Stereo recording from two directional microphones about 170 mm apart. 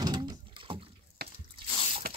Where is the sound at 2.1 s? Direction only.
60° right (ahead or behind).